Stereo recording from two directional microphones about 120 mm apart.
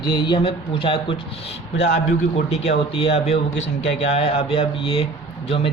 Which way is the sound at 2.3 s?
60° left (ahead or behind).